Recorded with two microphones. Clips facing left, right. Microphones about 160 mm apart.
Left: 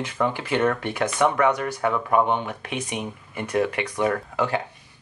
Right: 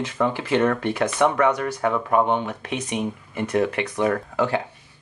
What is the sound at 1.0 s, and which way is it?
Speech, 10° right (ahead or behind).